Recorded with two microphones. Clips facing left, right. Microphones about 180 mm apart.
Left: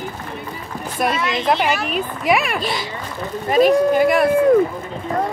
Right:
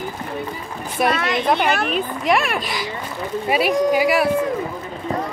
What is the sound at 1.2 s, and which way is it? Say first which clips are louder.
Speech: even; 60° right (ahead or behind).